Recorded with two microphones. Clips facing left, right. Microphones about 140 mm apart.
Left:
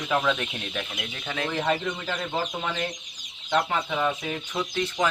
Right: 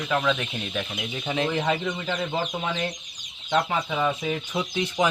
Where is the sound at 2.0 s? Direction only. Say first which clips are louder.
Right 2 dB; centre (ahead or behind); by 5.1 s 15° right (ahead or behind).